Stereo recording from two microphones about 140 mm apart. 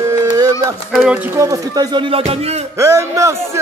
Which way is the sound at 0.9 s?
10° right (ahead or behind).